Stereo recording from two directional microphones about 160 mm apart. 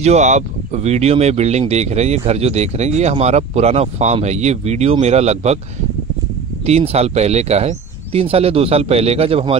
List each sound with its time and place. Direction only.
0.0 s speech: 45° right (ahead or behind)
6.6 s speech: 40° right (ahead or behind)